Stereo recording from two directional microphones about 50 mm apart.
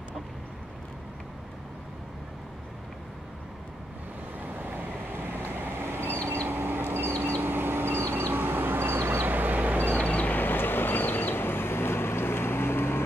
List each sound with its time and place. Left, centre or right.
4.6 s boat: right
6.2 s vehicle: right
9.3 s vehicle: right
9.9 s vehicle: left